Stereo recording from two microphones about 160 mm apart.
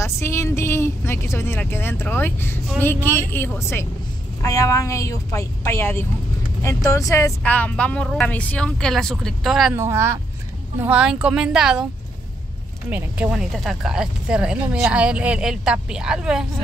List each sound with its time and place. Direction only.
0.0 s speech: 15° left (ahead or behind); by 9.8 s 5° right (ahead or behind)
9.8 s speech: 15° right (ahead or behind)
12.9 s speech: 10° right (ahead or behind)